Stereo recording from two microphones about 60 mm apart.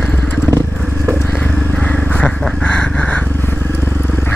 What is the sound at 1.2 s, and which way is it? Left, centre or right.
Wild animals, left.